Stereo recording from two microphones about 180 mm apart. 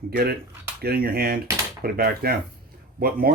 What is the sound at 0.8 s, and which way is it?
Speech, 55° right (ahead or behind).